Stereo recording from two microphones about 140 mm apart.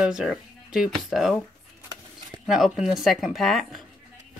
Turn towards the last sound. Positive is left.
turn(degrees=0)  # may be behind; listen again after turning